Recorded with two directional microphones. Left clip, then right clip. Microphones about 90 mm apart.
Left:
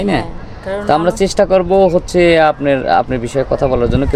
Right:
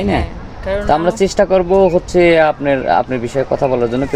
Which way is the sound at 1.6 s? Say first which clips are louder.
Left 1 dB; 55° left (ahead or behind).